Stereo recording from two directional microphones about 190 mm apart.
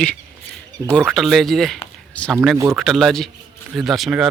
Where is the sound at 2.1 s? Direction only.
5° left (ahead or behind).